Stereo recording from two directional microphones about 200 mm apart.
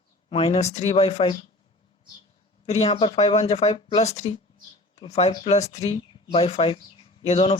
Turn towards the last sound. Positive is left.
turn(degrees=30)  # may be behind; listen again after turning